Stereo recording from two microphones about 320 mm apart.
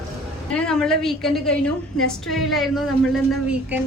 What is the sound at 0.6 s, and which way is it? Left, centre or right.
A woman's voice, centre.